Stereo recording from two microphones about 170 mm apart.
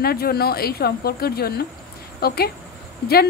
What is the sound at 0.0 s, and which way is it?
A woman's voice, 65° left (ahead or behind).